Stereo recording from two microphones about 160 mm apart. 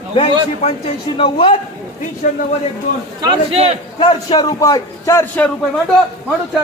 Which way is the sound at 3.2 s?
35° right (ahead or behind).